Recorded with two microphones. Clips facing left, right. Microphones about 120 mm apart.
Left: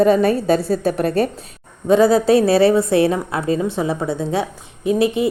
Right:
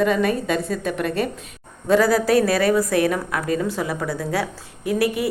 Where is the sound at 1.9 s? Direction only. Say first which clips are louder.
Left 4 dB; 25° left (ahead or behind).